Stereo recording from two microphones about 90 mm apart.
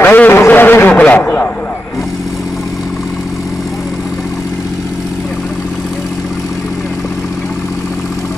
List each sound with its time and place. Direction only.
0.0 s a man's voice: 20° left (ahead or behind)